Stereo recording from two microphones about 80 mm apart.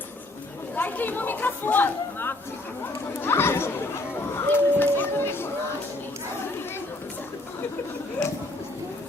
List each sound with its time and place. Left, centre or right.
0.8 s speech: left